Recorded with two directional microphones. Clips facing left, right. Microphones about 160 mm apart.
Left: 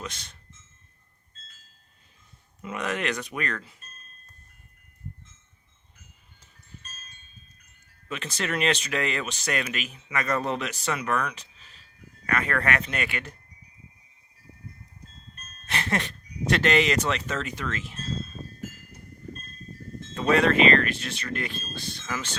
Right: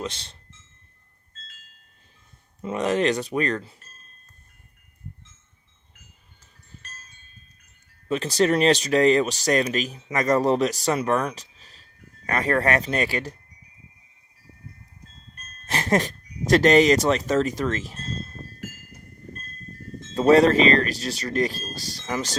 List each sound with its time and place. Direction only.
0.0 s speech: 30° right (ahead or behind)
2.6 s speech: 30° right (ahead or behind)
8.0 s speech: 35° right (ahead or behind)
15.6 s speech: 40° right (ahead or behind)
20.1 s speech: 35° right (ahead or behind)